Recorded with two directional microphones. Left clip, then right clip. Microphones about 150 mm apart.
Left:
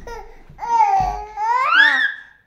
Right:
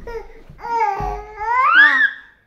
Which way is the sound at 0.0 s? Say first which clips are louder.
Right 3 dB; 40° left (ahead or behind).